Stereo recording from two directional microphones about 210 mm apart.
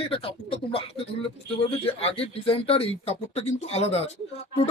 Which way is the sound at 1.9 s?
30° left (ahead or behind).